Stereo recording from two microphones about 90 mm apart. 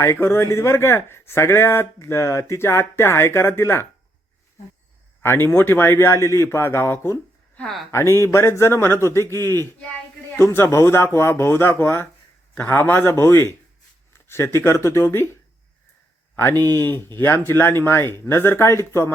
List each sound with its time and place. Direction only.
0.0 s speech: 30° left (ahead or behind)
5.2 s speech: 25° left (ahead or behind)